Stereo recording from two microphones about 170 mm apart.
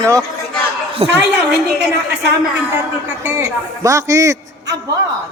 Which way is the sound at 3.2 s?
15° right (ahead or behind).